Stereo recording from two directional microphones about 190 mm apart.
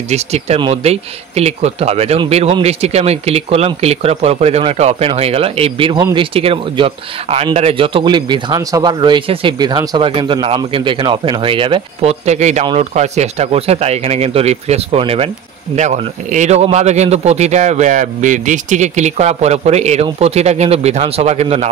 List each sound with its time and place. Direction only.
0.1 s speech: 35° right (ahead or behind)